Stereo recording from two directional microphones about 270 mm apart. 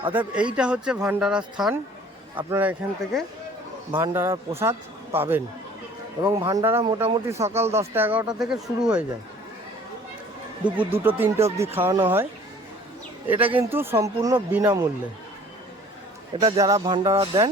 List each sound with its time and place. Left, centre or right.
0.0 s speech: centre
0.3 s speech: centre
10.8 s speech: centre
13.6 s speech: centre
16.4 s speech: centre